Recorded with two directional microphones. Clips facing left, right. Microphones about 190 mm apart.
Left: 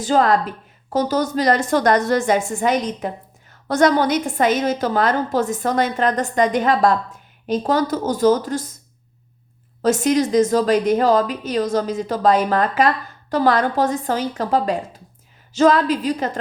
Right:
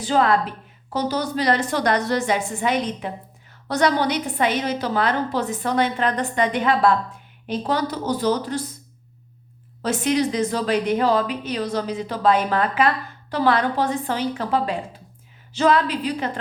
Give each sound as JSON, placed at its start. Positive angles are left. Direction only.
{"t": 0.0, "sound": "a woman's voice", "side_deg": 40}
{"t": 9.8, "sound": "a woman's voice", "side_deg": 45}